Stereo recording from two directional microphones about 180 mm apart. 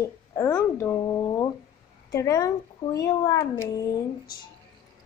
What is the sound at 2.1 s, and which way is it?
Speech, 15° left (ahead or behind).